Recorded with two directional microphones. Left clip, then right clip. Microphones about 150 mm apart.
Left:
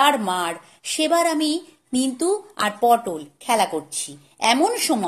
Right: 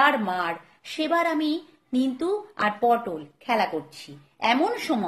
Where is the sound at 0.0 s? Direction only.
35° left (ahead or behind).